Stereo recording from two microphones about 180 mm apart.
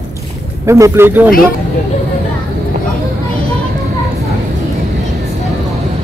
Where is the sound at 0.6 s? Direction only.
15° right (ahead or behind).